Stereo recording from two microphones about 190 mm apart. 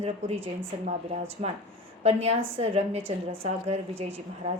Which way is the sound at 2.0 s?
35° right (ahead or behind).